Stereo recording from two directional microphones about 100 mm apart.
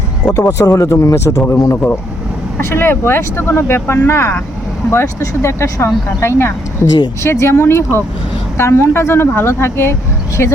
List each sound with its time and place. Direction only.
0.3 s speech: 35° left (ahead or behind)
1.7 s speech: 20° left (ahead or behind)